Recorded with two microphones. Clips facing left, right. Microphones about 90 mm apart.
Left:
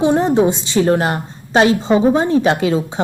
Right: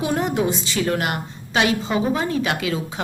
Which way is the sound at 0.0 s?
30° left (ahead or behind).